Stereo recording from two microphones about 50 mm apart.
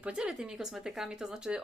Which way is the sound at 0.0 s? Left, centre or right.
Right.